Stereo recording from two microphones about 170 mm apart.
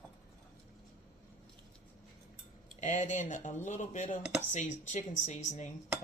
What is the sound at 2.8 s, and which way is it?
Speech, 45° left (ahead or behind).